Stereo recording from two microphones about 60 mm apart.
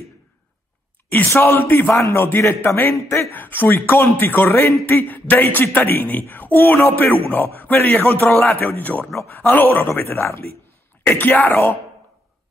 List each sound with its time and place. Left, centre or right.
1.1 s a man's voice: left
3.3 s a man's voice: left
11.4 s a man's voice: left